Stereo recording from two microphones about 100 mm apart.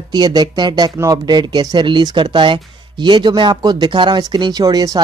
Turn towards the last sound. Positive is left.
turn(degrees=-40)  # may be behind; listen again after turning